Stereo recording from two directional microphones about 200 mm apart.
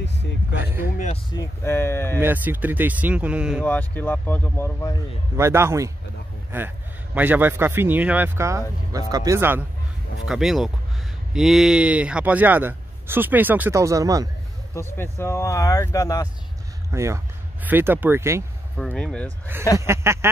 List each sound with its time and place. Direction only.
0.0 s speech: 60° left (ahead or behind)
0.6 s a man's voice: 10° right (ahead or behind)
0.9 s speech: 35° left (ahead or behind)
1.3 s speech: 15° left (ahead or behind)
2.1 s a man's voice: 10° right (ahead or behind)
3.6 s speech: 10° left (ahead or behind)
5.3 s a man's voice: 15° right (ahead or behind)
14.7 s speech: 10° left (ahead or behind)
16.9 s a man's voice: 15° right (ahead or behind)
18.9 s speech: 5° left (ahead or behind)
19.8 s a man's voice: 15° right (ahead or behind)